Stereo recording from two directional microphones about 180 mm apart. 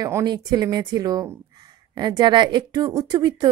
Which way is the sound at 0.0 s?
20° right (ahead or behind).